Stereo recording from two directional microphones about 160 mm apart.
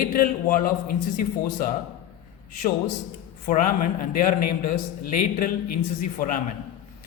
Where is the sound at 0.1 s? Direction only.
60° left (ahead or behind).